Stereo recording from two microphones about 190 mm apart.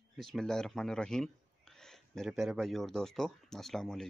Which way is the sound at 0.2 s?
Centre (ahead or behind).